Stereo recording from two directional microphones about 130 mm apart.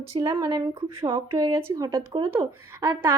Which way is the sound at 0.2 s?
40° right (ahead or behind).